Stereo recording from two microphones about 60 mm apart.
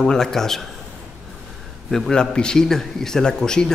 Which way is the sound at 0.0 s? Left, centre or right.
Centre.